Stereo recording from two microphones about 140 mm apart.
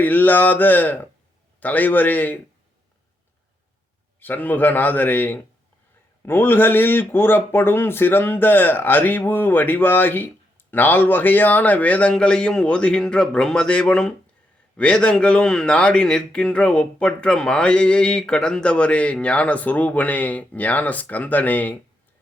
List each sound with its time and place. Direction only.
0.0 s a man's voice: 15° left (ahead or behind)
4.2 s a man's voice: 15° left (ahead or behind)